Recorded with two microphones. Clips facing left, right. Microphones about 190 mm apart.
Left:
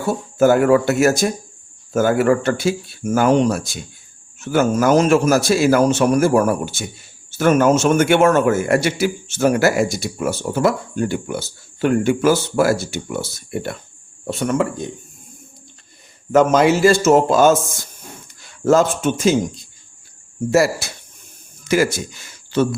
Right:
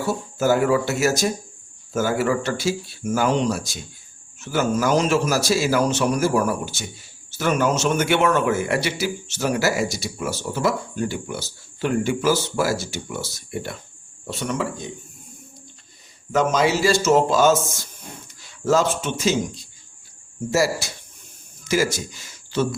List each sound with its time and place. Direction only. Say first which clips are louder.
0.3 s a man's voice: left 6 dB; 55° left (ahead or behind)
16.3 s a man's voice: left 6 dB; 55° left (ahead or behind)
18.4 s a sound: left 5 dB; 50° left (ahead or behind)
19.0 s a man's voice: left 6 dB; 50° left (ahead or behind)